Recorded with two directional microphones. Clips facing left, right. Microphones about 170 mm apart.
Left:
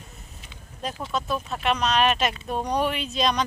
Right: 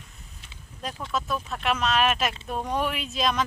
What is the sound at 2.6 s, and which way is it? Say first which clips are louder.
Speech: left 3 dB; centre (ahead or behind).